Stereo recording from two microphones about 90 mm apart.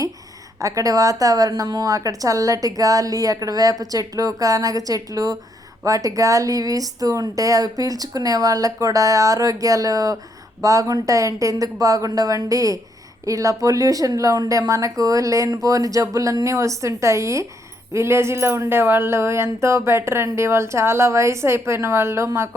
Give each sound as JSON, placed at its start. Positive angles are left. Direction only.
{"t": 0.6, "sound": "a woman's voice", "side_deg": -40}